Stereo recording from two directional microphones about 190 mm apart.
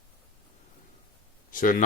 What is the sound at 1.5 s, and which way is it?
Speech, 45° left (ahead or behind).